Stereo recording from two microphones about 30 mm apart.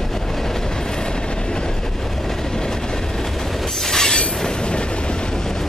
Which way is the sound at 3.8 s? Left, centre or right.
Centre.